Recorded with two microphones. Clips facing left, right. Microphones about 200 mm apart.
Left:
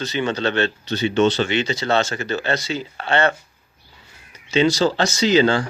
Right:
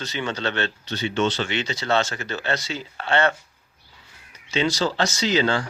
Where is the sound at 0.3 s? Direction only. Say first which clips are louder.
Left 5 dB; 20° left (ahead or behind).